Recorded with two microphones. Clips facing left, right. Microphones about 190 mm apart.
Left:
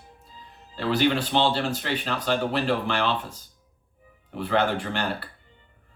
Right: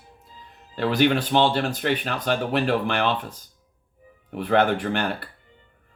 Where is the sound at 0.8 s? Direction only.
55° right (ahead or behind).